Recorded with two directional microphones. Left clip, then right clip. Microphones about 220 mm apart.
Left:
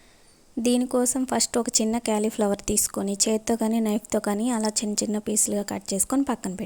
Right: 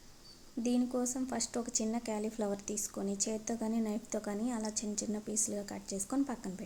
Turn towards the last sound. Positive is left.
turn(degrees=40)  # may be behind; listen again after turning